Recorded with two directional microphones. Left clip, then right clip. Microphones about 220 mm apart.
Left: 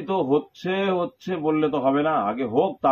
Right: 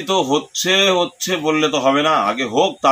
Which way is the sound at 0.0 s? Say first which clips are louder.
Right 5 dB; 5° right (ahead or behind).